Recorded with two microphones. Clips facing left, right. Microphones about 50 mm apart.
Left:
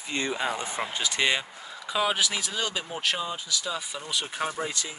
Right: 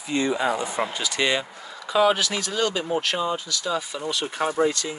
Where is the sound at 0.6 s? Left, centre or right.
Right.